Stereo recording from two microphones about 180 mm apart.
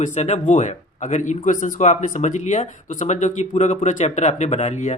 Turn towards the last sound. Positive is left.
turn(degrees=40)  # may be behind; listen again after turning